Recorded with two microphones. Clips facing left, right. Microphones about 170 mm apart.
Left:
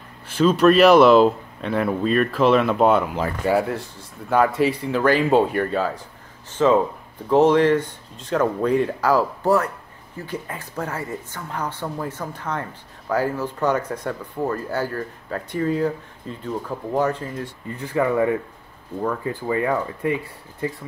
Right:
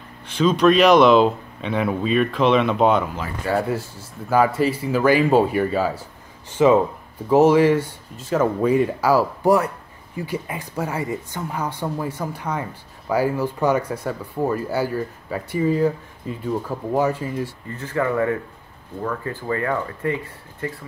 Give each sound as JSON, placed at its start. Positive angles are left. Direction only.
{"t": 0.4, "sound": "speech", "side_deg": 5}
{"t": 17.6, "sound": "speech", "side_deg": 15}